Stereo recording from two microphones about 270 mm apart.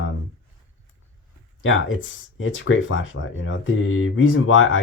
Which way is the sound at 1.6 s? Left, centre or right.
Left.